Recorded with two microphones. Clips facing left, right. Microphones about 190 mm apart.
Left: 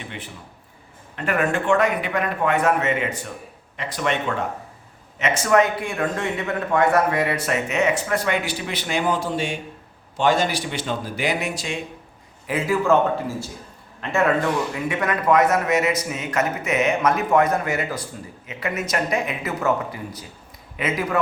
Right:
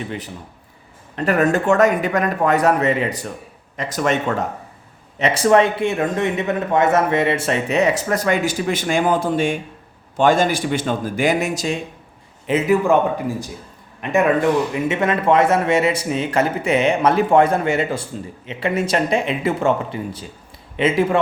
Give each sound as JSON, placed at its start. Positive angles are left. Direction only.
{"t": 1.1, "sound": "a man's voice", "side_deg": -35}
{"t": 5.2, "sound": "a man's voice", "side_deg": -35}
{"t": 12.5, "sound": "a man's voice", "side_deg": -20}